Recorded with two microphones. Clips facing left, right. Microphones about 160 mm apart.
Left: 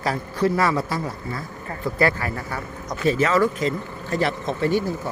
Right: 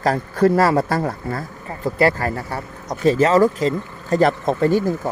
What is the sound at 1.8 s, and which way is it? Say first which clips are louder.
Speech: right 4 dB; 40° right (ahead or behind).